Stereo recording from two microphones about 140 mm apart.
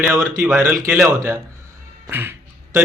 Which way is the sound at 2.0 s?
15° right (ahead or behind).